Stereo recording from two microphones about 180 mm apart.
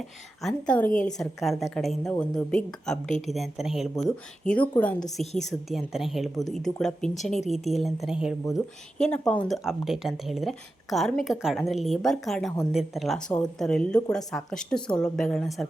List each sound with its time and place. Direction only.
0.4 s a woman's voice: 5° left (ahead or behind)
5.2 s a woman's voice: 40° left (ahead or behind)
5.5 s a woman's voice: centre (ahead or behind)